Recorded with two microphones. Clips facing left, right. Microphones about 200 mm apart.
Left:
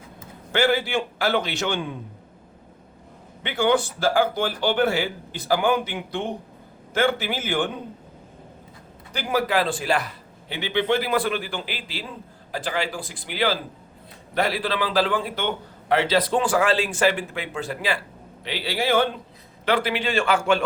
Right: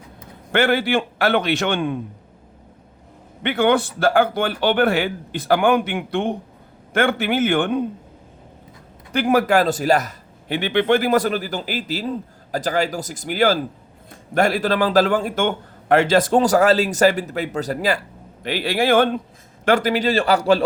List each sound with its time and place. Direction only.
0.5 s speech: 55° right (ahead or behind)
3.4 s speech: 60° right (ahead or behind)
9.1 s a man's voice: 50° right (ahead or behind)
19.6 s a man's voice: 45° right (ahead or behind)